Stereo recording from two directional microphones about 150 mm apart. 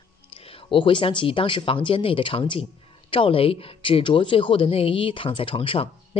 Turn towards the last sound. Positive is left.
turn(degrees=35)  # may be behind; listen again after turning